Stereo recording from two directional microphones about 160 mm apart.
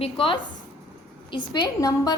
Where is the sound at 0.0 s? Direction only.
35° left (ahead or behind).